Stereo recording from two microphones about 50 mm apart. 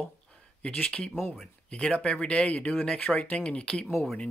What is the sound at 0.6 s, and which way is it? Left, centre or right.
Speech, centre.